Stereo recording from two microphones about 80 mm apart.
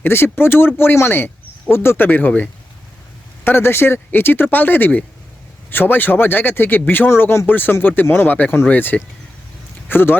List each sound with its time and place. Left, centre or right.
0.0 s speech: left